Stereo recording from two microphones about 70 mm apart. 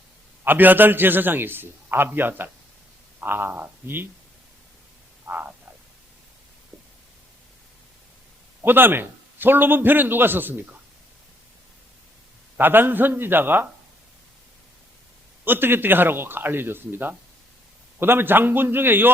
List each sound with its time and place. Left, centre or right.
0.4 s a man's voice: right
5.2 s frog: right
8.6 s a man's voice: right
12.5 s a man's voice: right
15.4 s speech: right